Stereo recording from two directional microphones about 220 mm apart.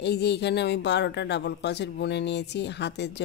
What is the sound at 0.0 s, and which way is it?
A man's voice, 50° left (ahead or behind).